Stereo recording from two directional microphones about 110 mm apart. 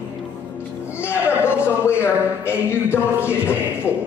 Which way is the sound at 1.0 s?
20° left (ahead or behind).